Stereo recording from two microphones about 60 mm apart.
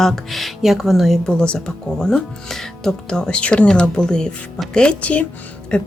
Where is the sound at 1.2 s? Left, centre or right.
Centre.